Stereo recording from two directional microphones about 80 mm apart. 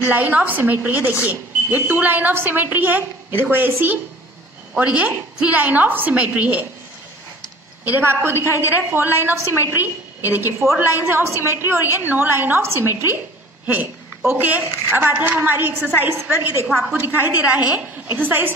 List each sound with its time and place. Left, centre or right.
0.0 s a woman's voice: right
7.8 s a woman's voice: right